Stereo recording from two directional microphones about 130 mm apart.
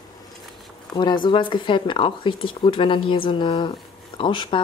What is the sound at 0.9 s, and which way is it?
Speech, 35° left (ahead or behind).